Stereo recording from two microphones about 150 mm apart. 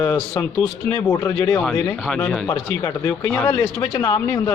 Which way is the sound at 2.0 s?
Centre (ahead or behind).